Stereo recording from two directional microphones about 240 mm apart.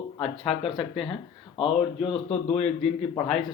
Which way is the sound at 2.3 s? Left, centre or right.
Left.